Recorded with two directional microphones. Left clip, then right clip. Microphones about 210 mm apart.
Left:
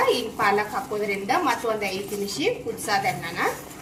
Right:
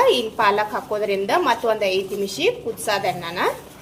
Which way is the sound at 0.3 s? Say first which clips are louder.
Right 4 dB; 45° right (ahead or behind).